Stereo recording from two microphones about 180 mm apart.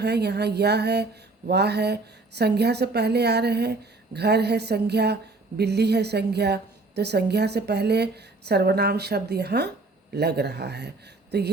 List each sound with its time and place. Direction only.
0.0 s a woman's voice: 65° right (ahead or behind)